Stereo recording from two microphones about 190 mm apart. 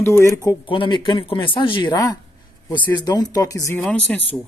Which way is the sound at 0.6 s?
25° left (ahead or behind).